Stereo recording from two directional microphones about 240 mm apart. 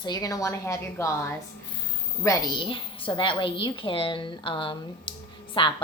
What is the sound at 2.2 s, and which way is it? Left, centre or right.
A woman's voice, centre.